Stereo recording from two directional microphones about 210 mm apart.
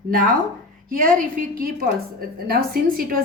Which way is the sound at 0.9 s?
40° right (ahead or behind).